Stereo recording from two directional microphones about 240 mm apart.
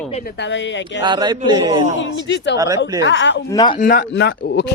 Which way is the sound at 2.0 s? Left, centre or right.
Left.